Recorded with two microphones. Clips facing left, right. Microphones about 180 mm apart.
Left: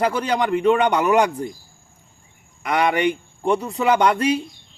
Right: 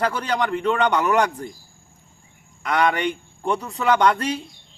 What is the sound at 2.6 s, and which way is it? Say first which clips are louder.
A man's voice: left 2 dB; 15° left (ahead or behind).